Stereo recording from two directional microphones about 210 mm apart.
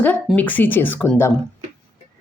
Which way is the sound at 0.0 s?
5° left (ahead or behind).